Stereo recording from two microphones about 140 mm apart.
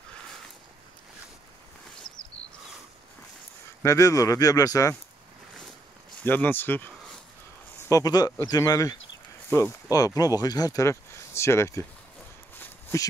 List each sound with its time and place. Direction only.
3.8 s speech: 25° left (ahead or behind)
6.2 s speech: 15° left (ahead or behind)
7.9 s speech: 25° left (ahead or behind)